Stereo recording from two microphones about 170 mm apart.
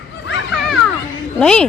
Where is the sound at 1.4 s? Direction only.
5° left (ahead or behind).